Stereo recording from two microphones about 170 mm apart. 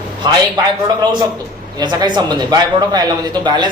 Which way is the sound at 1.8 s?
25° right (ahead or behind).